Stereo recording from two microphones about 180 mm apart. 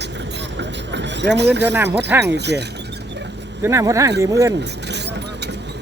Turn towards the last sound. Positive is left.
turn(degrees=-20)  # may be behind; listen again after turning